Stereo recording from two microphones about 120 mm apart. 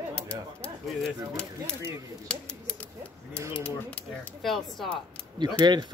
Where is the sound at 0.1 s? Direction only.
10° left (ahead or behind).